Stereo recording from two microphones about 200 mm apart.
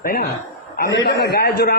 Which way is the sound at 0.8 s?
60° left (ahead or behind).